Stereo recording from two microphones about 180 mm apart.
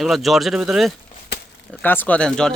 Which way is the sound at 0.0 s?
Centre (ahead or behind).